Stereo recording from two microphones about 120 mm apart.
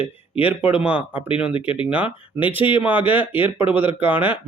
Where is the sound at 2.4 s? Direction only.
10° right (ahead or behind).